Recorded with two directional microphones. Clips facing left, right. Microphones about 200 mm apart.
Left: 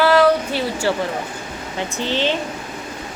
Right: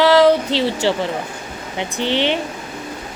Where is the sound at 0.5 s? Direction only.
90° right.